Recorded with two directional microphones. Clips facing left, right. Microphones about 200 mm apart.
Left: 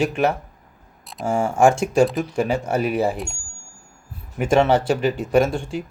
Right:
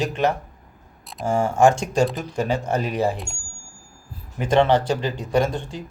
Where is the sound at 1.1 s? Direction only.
5° left (ahead or behind).